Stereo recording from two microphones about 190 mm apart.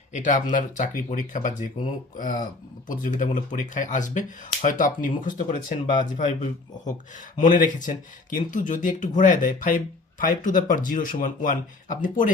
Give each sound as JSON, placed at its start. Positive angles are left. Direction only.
{"t": 0.2, "sound": "speech", "side_deg": 45}